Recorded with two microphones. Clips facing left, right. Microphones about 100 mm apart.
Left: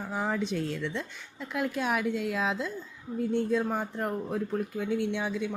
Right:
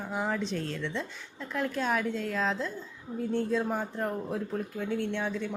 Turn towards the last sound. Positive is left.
turn(degrees=5)  # may be behind; listen again after turning